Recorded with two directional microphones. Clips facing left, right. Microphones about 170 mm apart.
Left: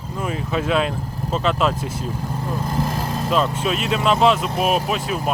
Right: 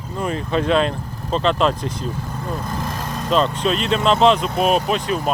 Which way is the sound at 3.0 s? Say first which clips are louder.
Right 3 dB; 5° left (ahead or behind).